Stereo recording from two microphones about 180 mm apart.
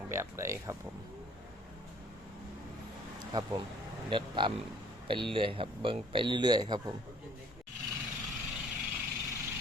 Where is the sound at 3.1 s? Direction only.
20° right (ahead or behind).